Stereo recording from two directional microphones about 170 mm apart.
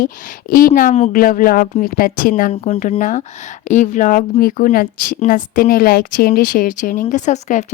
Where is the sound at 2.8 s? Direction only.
50° left (ahead or behind).